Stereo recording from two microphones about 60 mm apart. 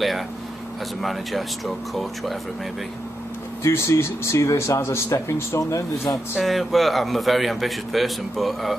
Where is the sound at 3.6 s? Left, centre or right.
Left.